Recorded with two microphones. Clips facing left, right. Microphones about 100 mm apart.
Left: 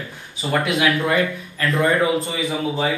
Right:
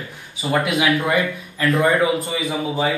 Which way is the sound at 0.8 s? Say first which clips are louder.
Even; 15° right (ahead or behind).